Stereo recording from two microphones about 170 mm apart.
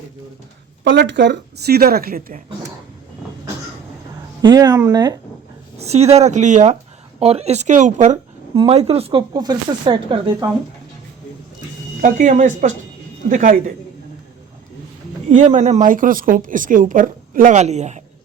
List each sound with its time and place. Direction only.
0.9 s a woman's voice: 90° right; by 2.4 s 60° right (ahead or behind)
4.4 s speech: 20° right (ahead or behind)
5.8 s a woman's voice: 40° right (ahead or behind)
12.0 s a woman's voice: 45° right (ahead or behind)
15.3 s a woman's voice: 45° right (ahead or behind)